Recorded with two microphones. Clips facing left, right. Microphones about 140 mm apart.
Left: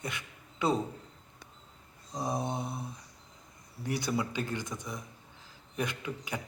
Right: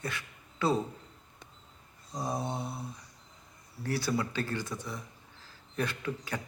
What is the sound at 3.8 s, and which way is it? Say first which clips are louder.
A man's voice: right 1 dB; 15° left (ahead or behind).